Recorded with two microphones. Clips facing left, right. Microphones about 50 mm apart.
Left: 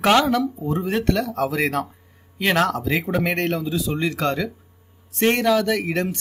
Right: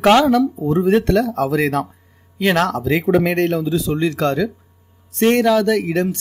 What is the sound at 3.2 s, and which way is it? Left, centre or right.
Speech, centre.